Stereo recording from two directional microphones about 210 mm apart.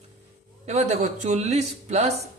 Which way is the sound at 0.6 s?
30° right (ahead or behind).